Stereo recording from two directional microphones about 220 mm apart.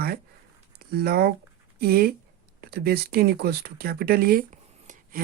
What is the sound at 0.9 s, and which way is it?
Speech, 45° right (ahead or behind).